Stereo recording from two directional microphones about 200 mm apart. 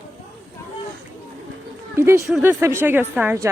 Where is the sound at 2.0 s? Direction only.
15° right (ahead or behind).